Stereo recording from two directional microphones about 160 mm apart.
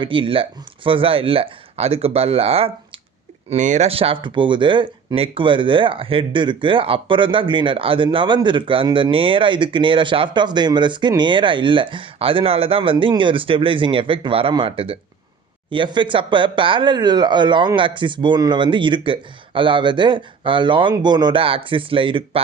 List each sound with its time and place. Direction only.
0.0 s speech: 30° right (ahead or behind)
3.5 s speech: 50° right (ahead or behind)